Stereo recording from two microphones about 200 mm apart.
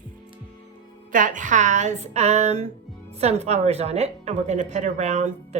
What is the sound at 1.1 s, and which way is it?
A woman's voice, 40° right (ahead or behind).